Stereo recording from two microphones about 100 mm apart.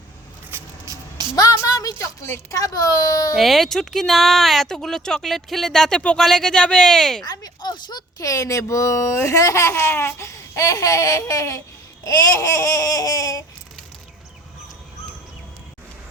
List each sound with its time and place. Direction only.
1.4 s speech: 35° left (ahead or behind)
3.3 s speech: centre (ahead or behind)
7.3 s speech: 40° left (ahead or behind)
8.3 s speech: 30° left (ahead or behind)